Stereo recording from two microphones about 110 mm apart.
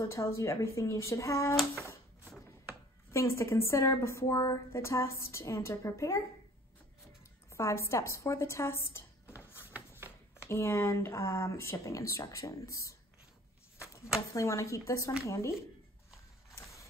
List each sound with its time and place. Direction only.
0.0 s a woman's voice: 25° left (ahead or behind)
3.1 s a woman's voice: 25° left (ahead or behind)
7.4 s a woman's voice: 25° left (ahead or behind)
9.7 s a sound: 15° right (ahead or behind)
10.5 s a woman's voice: 25° left (ahead or behind)
14.3 s a woman's voice: 30° left (ahead or behind)